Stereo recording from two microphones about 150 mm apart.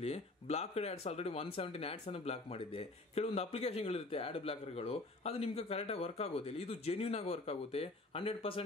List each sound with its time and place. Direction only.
0.0 s speech: 45° left (ahead or behind)